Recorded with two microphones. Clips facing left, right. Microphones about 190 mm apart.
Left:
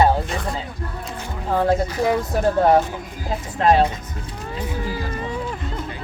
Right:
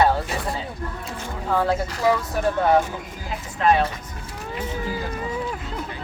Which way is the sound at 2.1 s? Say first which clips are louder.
Left 4 dB; 35° left (ahead or behind).